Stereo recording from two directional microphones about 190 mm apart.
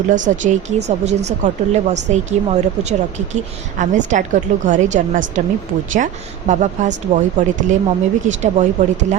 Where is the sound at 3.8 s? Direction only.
40° right (ahead or behind).